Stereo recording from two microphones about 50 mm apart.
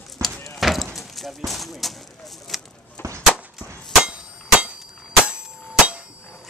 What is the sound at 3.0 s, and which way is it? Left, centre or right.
Whip, left.